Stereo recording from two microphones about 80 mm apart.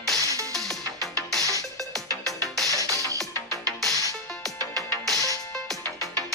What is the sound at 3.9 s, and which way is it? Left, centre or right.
Music, right.